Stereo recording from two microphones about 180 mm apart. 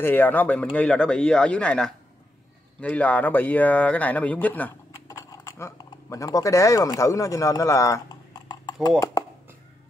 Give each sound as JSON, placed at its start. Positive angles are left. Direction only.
{"t": 0.0, "sound": "speech", "side_deg": 10}